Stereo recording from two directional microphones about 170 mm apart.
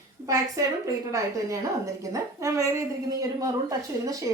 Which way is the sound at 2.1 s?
20° right (ahead or behind).